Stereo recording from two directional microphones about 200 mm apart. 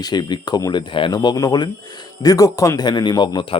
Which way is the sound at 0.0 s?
20° left (ahead or behind).